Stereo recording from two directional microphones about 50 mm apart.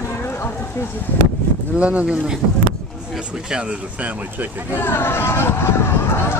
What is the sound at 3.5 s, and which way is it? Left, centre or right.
Speech, centre.